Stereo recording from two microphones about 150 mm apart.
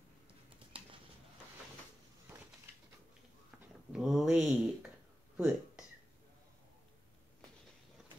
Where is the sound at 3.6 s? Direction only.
5° right (ahead or behind).